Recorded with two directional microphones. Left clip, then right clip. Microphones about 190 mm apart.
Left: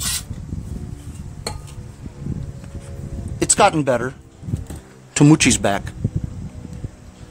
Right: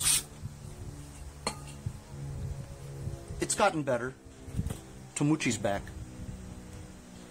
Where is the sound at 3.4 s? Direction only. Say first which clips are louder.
Left 12 dB; 55° left (ahead or behind).